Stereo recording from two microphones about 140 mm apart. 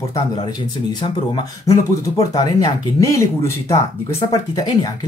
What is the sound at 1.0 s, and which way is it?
Speech, 35° left (ahead or behind).